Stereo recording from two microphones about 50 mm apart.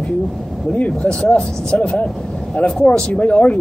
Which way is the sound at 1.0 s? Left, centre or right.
Centre.